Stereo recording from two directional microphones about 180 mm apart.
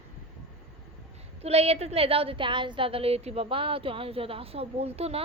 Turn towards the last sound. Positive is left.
turn(degrees=-35)  # may be behind; listen again after turning